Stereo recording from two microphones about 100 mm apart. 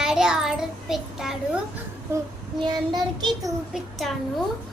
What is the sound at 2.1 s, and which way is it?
Child singing, 25° right (ahead or behind).